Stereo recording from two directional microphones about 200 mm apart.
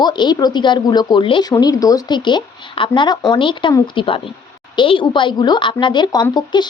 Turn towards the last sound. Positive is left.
turn(degrees=20)  # may be behind; listen again after turning